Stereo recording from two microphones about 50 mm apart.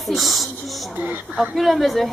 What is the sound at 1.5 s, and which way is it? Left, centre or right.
Speech, centre.